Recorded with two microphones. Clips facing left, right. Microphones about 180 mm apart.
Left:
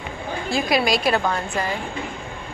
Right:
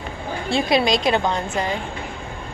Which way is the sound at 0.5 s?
25° right (ahead or behind).